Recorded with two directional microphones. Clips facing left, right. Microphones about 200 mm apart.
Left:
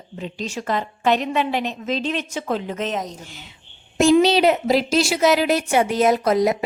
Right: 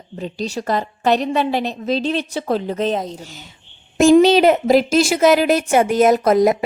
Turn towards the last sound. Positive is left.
turn(degrees=-50)  # may be behind; listen again after turning